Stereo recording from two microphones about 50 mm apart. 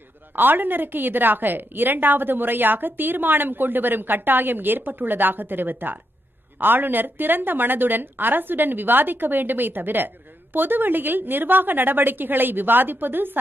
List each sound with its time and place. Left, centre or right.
0.4 s a woman's voice: right